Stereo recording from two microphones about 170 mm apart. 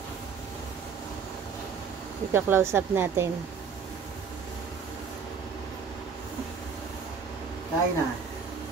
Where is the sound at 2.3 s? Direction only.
15° right (ahead or behind).